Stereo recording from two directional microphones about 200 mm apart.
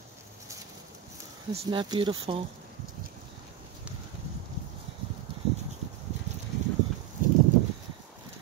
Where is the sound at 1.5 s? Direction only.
25° right (ahead or behind).